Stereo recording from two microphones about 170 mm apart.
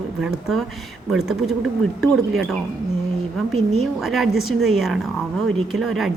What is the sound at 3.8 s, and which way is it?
A woman's voice, centre (ahead or behind).